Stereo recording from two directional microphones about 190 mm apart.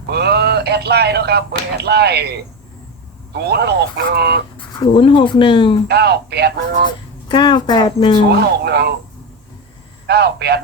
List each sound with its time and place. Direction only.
0.1 s speech: 60° right (ahead or behind)
3.5 s speech: 60° right (ahead or behind)
4.8 s speech: 25° left (ahead or behind)
5.9 s speech: 60° right (ahead or behind)
7.3 s speech: 25° left (ahead or behind)
8.6 s speech: 60° right (ahead or behind)
10.1 s speech: 60° right (ahead or behind)